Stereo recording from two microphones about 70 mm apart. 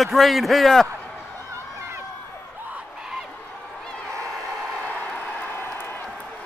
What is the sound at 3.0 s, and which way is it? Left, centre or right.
Fowl, centre.